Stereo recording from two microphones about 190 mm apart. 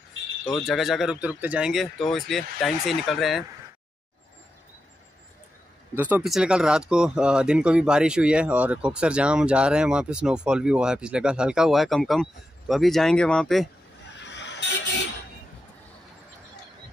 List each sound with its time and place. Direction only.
0.5 s speech: centre (ahead or behind)
5.9 s speech: 10° right (ahead or behind)
14.1 s vehicle: 65° left (ahead or behind)